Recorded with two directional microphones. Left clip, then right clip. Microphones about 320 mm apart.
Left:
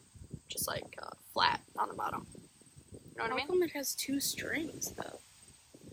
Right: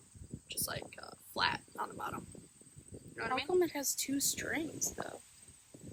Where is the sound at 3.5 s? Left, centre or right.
Centre.